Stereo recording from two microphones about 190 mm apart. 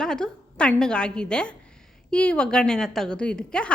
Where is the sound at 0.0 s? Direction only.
5° left (ahead or behind).